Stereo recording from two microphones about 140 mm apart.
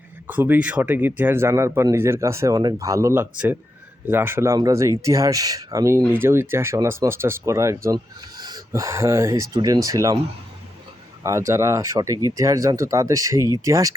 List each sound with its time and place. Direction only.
0.3 s speech: 15° right (ahead or behind)
11.2 s speech: 20° right (ahead or behind)